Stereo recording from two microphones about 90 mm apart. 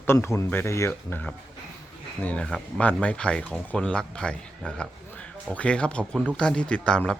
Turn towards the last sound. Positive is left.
turn(degrees=10)  # may be behind; listen again after turning